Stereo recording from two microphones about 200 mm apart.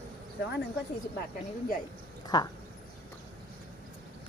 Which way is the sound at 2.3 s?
20° left (ahead or behind).